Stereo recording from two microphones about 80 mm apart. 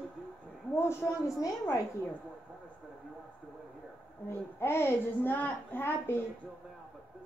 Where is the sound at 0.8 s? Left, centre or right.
Left.